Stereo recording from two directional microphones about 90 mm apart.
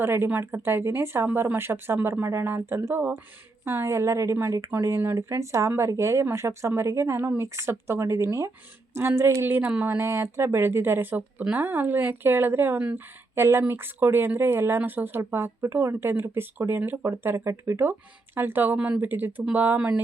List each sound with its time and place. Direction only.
0.0 s speech: 25° right (ahead or behind)
9.6 s speech: 20° right (ahead or behind)